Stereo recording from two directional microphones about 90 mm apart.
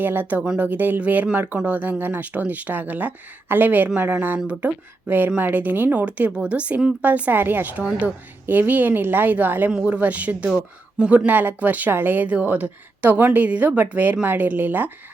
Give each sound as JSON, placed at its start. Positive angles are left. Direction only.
{"t": 0.0, "sound": "a woman's voice", "side_deg": -20}